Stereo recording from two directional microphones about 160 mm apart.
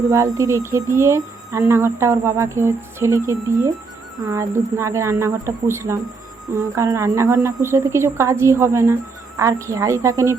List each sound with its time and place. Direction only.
0.1 s a woman's voice: 20° right (ahead or behind)